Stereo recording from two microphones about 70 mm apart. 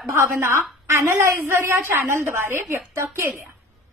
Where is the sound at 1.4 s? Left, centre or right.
Right.